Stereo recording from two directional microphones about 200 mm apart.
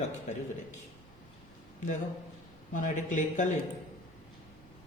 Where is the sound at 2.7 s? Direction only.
40° left (ahead or behind).